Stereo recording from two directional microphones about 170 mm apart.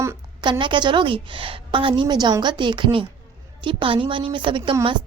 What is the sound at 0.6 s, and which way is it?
A woman's voice, 30° right (ahead or behind).